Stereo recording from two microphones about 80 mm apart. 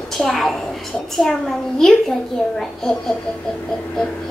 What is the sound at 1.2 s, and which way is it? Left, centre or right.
Speech, centre.